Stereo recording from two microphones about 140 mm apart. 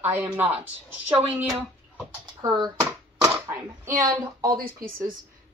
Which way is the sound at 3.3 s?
15° right (ahead or behind).